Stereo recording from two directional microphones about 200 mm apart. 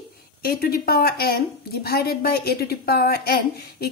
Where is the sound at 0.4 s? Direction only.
50° left (ahead or behind).